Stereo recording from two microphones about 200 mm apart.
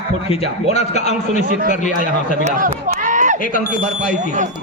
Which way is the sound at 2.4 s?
40° right (ahead or behind).